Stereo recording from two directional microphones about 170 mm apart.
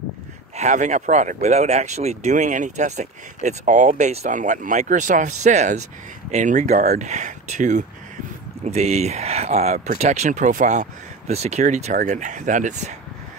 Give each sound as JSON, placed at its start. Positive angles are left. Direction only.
{"t": 0.6, "sound": "speech", "side_deg": -45}